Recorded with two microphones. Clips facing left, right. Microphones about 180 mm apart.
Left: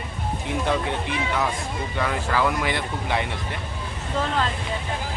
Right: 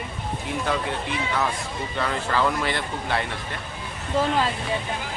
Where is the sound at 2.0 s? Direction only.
10° left (ahead or behind).